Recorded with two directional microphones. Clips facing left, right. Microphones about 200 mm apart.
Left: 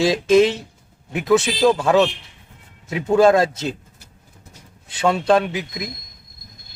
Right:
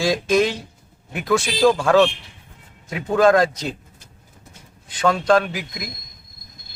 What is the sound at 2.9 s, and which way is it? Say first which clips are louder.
Speech: left 2 dB; 25° left (ahead or behind).